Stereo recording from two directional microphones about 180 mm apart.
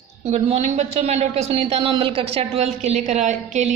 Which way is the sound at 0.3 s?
35° right (ahead or behind).